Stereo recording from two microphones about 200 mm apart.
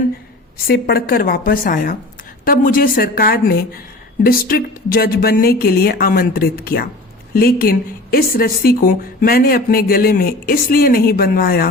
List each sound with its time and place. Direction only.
0.7 s a woman's voice: 50° left (ahead or behind)